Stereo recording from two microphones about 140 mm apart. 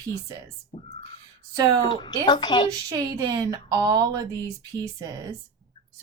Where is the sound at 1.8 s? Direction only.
30° left (ahead or behind).